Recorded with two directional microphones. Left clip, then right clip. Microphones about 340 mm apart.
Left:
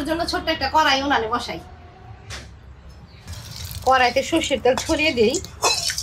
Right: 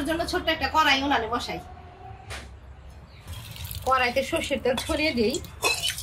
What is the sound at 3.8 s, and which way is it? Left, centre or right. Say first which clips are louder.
A woman's voice: left 6 dB; left.